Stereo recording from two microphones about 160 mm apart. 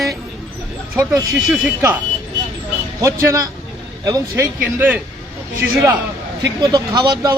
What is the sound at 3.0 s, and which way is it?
Speech, 15° right (ahead or behind).